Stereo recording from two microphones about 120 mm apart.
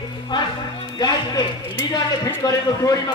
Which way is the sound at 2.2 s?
30° left (ahead or behind).